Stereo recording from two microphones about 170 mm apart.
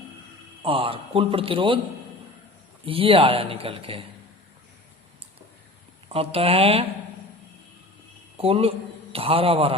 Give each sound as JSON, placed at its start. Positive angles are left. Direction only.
{"t": 0.6, "sound": "speech", "side_deg": -30}
{"t": 2.8, "sound": "speech", "side_deg": -35}
{"t": 6.1, "sound": "speech", "side_deg": -35}
{"t": 8.4, "sound": "speech", "side_deg": -35}